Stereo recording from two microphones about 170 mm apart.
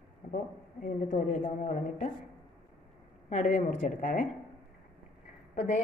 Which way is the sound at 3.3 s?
50° left (ahead or behind).